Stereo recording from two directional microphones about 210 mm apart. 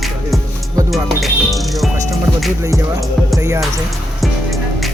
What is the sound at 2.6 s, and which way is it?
Speech, 15° right (ahead or behind).